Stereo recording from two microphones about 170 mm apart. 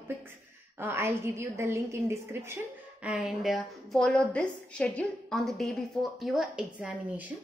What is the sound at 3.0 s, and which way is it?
A woman's voice, 5° right (ahead or behind).